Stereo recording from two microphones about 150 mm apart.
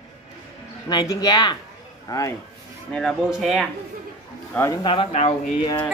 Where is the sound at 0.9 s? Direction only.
25° left (ahead or behind).